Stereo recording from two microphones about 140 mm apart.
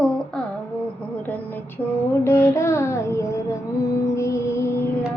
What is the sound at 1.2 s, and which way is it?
Speech, 15° left (ahead or behind).